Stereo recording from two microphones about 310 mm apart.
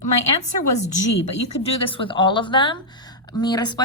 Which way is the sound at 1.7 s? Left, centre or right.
Centre.